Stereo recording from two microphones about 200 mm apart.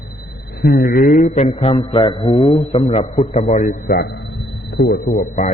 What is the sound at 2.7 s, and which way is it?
A man's voice, 30° left (ahead or behind).